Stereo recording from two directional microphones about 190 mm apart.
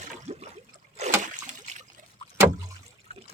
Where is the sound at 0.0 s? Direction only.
35° right (ahead or behind).